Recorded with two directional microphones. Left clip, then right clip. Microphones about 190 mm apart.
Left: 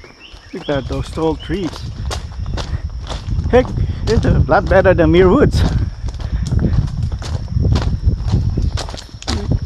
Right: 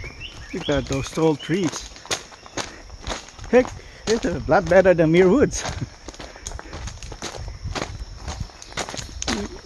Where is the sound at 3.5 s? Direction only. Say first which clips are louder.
Left 4 dB; 25° left (ahead or behind).